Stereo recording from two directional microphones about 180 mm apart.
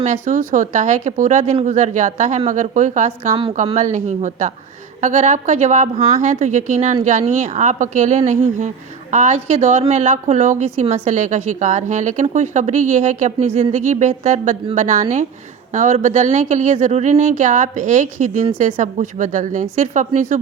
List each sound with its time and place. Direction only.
0.0 s a woman's voice: 45° right (ahead or behind)